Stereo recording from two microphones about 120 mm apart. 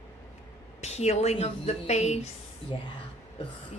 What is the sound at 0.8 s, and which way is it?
A woman's voice, 65° left (ahead or behind).